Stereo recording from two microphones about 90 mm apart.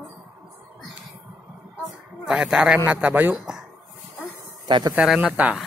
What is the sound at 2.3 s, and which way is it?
A man's voice, 10° right (ahead or behind).